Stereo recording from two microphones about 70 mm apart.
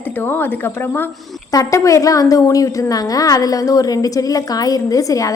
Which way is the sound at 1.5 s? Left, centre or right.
Left.